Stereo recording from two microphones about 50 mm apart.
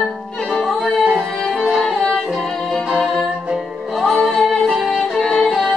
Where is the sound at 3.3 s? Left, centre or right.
Centre.